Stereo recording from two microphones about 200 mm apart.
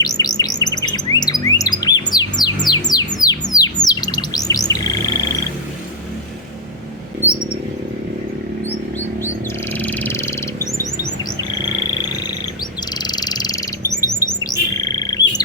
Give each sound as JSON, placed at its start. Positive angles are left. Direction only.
{"t": 0.0, "sound": "chirp", "side_deg": 20}
{"t": 2.6, "sound": "bird", "side_deg": 20}
{"t": 8.6, "sound": "bird", "side_deg": 10}
{"t": 9.7, "sound": "chirp", "side_deg": 10}
{"t": 13.0, "sound": "bird", "side_deg": 20}